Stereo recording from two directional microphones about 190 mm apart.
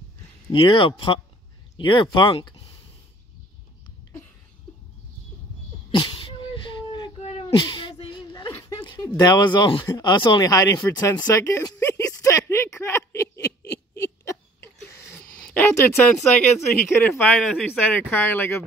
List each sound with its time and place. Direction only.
0.5 s speech: 25° left (ahead or behind)
5.9 s a sound: 25° left (ahead or behind)
7.2 s cat: 35° left (ahead or behind)
8.9 s speech: 20° left (ahead or behind)
10.8 s a sound: 15° left (ahead or behind)
14.2 s hiccup: 15° left (ahead or behind)
15.4 s speech: 10° left (ahead or behind)